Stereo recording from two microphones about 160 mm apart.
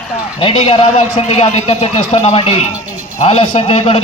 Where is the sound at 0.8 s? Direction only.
45° left (ahead or behind).